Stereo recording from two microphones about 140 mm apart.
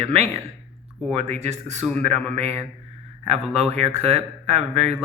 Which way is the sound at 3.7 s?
50° right (ahead or behind).